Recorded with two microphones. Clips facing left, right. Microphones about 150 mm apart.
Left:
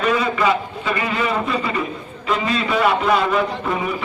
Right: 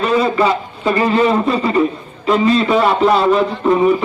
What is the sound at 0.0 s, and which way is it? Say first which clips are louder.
A man's voice: right 4 dB; 30° right (ahead or behind).